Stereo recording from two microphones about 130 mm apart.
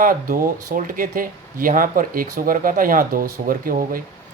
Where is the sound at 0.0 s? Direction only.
90° right.